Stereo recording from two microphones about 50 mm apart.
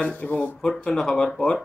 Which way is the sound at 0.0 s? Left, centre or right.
Left.